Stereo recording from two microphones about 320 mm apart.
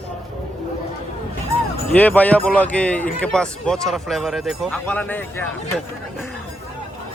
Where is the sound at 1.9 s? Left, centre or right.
Centre.